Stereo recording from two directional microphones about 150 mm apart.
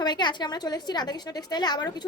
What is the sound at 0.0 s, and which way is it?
A woman's voice, 30° left (ahead or behind).